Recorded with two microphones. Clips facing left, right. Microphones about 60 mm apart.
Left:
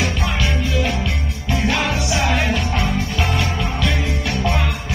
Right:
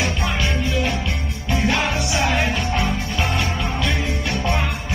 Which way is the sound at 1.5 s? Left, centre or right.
Centre.